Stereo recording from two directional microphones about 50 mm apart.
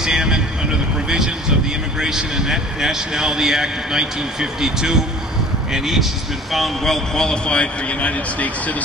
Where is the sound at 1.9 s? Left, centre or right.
Centre.